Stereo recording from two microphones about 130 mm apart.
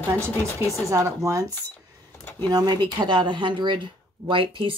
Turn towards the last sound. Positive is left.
turn(degrees=-40)  # may be behind; listen again after turning